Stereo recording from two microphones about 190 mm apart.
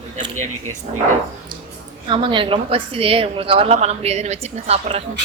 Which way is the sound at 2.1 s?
25° right (ahead or behind).